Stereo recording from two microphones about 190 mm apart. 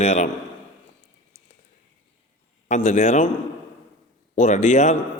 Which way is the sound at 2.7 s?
40° left (ahead or behind).